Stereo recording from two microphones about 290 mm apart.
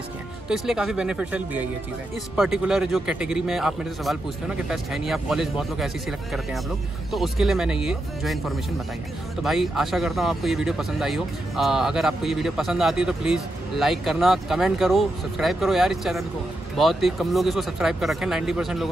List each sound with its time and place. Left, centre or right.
0.5 s speech: centre